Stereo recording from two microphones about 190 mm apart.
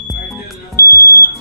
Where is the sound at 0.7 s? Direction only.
15° left (ahead or behind).